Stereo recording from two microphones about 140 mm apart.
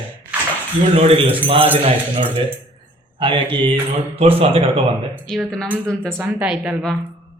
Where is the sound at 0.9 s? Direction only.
45° right (ahead or behind).